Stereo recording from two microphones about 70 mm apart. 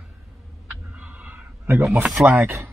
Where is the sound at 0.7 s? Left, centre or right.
Right.